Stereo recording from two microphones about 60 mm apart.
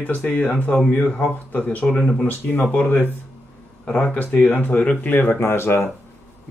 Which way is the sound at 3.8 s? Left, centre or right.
Centre.